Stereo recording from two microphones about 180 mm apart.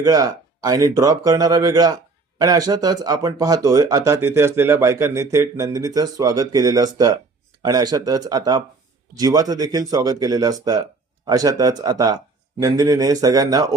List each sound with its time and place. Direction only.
0.0 s speech: 20° right (ahead or behind)